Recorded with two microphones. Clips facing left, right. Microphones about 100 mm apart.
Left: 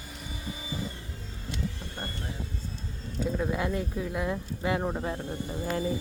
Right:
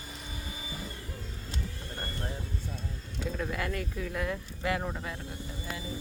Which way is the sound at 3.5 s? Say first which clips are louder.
Left 4 dB; 20° left (ahead or behind).